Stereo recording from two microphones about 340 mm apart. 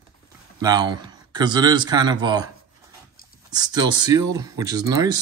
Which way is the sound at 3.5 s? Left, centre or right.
Centre.